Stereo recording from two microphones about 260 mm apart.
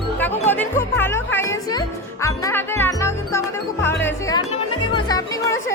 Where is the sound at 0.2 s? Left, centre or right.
Centre.